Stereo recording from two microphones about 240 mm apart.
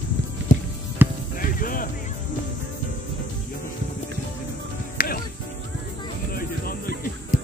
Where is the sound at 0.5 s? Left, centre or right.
Left.